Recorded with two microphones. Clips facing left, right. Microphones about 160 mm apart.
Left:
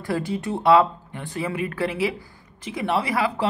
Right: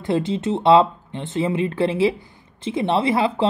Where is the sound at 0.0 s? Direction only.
20° right (ahead or behind).